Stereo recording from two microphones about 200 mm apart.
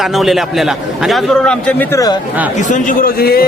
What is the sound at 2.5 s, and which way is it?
Speech, 40° left (ahead or behind).